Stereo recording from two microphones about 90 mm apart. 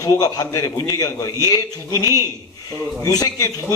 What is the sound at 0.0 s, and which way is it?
A man's voice, 40° left (ahead or behind).